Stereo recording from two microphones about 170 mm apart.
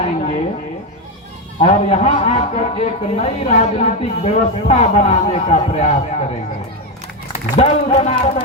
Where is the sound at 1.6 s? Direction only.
40° left (ahead or behind).